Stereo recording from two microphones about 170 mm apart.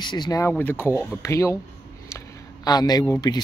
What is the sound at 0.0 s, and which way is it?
A man's voice, 25° left (ahead or behind).